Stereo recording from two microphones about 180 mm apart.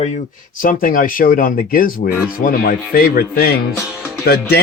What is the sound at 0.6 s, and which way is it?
Speech, 50° left (ahead or behind).